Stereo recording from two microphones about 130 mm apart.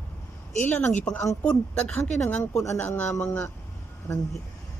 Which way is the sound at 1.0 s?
10° left (ahead or behind).